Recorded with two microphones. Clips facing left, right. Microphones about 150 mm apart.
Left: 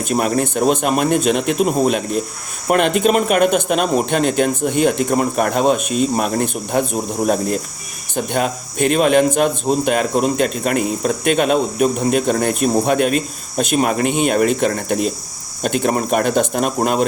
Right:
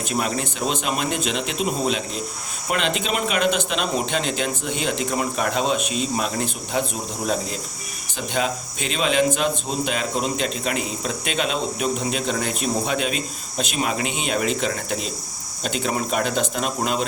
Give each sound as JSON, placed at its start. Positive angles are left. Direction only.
{"t": 0.1, "sound": "speech", "side_deg": 50}